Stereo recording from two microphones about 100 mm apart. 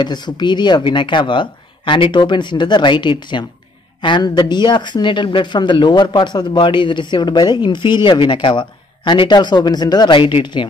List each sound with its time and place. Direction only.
0.0 s speech: 45° left (ahead or behind)
10.1 s speech: 55° left (ahead or behind)